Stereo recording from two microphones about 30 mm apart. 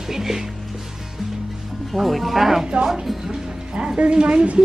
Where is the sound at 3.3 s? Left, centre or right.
Right.